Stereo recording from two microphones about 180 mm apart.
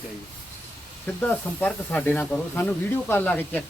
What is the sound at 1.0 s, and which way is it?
Speech, 10° left (ahead or behind).